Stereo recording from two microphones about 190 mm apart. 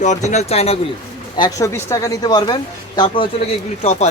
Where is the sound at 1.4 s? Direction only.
15° left (ahead or behind).